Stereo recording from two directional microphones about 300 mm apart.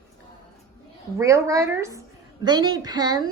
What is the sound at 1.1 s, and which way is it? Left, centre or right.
A woman's voice, centre.